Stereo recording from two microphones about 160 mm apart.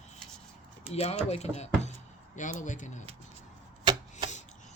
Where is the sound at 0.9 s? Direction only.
40° left (ahead or behind).